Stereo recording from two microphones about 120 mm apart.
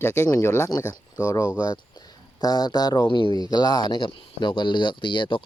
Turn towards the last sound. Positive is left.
turn(degrees=45)  # may be behind; listen again after turning